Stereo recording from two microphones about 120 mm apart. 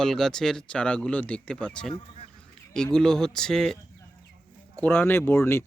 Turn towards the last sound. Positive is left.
turn(degrees=20)  # may be behind; listen again after turning